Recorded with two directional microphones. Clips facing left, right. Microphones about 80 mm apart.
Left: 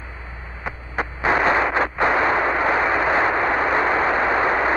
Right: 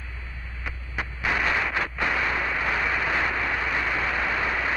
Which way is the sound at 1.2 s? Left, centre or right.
Left.